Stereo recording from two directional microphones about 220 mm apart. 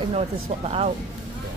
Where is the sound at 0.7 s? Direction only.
25° right (ahead or behind).